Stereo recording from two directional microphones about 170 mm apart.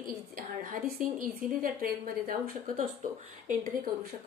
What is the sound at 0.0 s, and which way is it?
A woman's voice, 55° right (ahead or behind).